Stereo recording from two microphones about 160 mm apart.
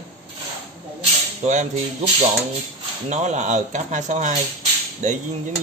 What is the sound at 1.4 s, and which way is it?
Speech, 45° right (ahead or behind).